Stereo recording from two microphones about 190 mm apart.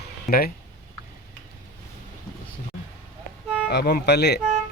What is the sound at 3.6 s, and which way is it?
Speech, 55° left (ahead or behind).